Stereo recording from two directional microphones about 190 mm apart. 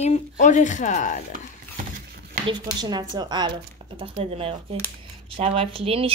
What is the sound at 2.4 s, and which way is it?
Speech, 20° right (ahead or behind).